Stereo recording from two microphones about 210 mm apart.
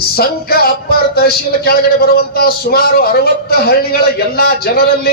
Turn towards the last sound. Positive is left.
turn(degrees=50)  # may be behind; listen again after turning